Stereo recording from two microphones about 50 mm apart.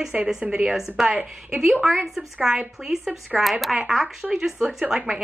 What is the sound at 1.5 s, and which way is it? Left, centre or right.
A woman's voice, centre.